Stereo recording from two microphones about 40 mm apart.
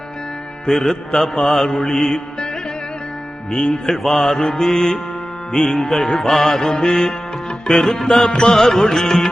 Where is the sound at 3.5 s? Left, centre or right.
Centre.